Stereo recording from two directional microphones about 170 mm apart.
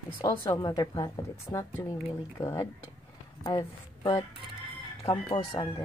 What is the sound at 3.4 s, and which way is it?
A woman's voice, 25° left (ahead or behind).